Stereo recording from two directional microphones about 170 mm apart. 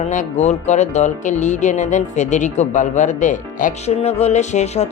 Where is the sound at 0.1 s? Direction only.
45° left (ahead or behind).